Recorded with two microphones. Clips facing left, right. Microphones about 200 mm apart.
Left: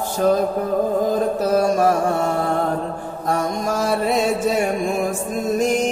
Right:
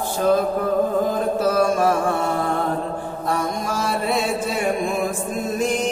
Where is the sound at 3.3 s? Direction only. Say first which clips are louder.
Left 3 dB; 45° left (ahead or behind).